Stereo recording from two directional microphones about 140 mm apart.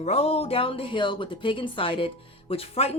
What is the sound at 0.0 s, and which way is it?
Speech, 50° left (ahead or behind).